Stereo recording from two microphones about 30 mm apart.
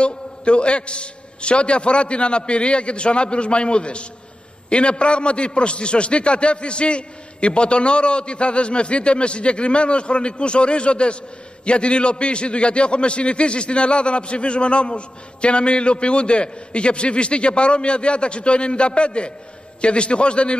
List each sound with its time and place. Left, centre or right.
0.0 s a man's voice: left